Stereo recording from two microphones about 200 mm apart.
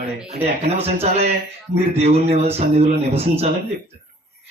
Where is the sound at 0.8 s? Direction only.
30° right (ahead or behind).